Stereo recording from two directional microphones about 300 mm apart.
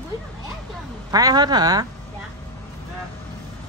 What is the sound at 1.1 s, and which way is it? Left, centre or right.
Speech, centre.